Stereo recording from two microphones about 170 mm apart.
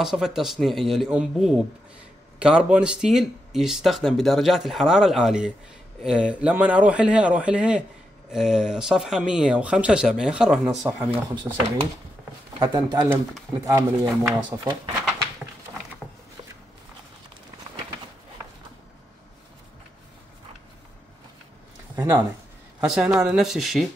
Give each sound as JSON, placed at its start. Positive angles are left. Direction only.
{"t": 0.0, "sound": "a man's voice", "side_deg": -5}
{"t": 12.7, "sound": "speech", "side_deg": -25}
{"t": 21.9, "sound": "speech", "side_deg": -10}